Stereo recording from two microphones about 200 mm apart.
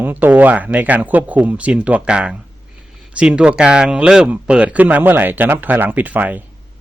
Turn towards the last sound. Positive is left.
turn(degrees=-10)  # may be behind; listen again after turning